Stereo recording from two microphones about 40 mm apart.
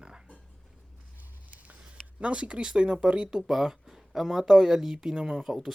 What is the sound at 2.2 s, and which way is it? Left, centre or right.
Speech, right.